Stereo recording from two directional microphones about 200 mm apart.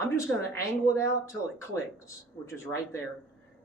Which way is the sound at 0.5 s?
15° left (ahead or behind).